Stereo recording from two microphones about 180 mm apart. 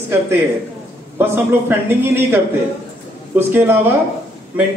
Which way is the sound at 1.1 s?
10° right (ahead or behind).